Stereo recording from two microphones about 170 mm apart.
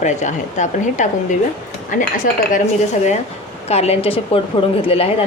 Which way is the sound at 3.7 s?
35° left (ahead or behind).